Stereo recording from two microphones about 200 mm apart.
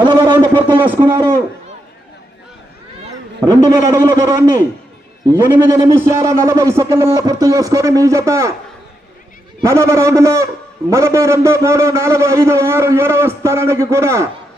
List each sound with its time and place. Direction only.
0.5 s a sound: 25° right (ahead or behind)
3.4 s a man's voice: 20° right (ahead or behind)
9.6 s a man's voice: 15° right (ahead or behind)